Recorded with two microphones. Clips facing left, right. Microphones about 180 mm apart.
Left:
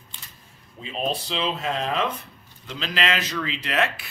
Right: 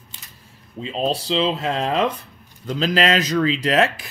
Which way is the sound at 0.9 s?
30° right (ahead or behind).